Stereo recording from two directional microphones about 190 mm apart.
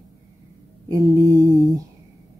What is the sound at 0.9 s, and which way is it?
Speech, 15° right (ahead or behind).